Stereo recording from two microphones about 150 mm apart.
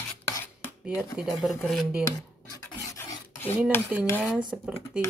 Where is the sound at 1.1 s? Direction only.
Centre (ahead or behind).